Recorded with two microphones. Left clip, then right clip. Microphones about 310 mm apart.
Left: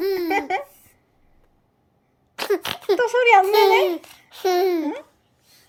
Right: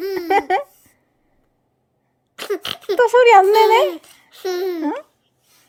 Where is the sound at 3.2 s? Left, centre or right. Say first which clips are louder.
Right 4 dB; centre.